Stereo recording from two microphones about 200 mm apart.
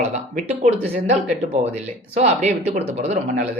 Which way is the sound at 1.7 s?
35° right (ahead or behind).